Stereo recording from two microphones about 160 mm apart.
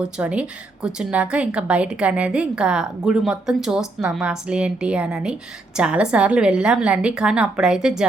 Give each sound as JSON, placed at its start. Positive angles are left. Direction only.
{"t": 0.0, "sound": "a woman's voice", "side_deg": -10}